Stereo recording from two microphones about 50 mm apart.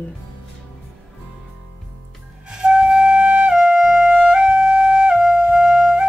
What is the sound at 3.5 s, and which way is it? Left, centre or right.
Music, centre.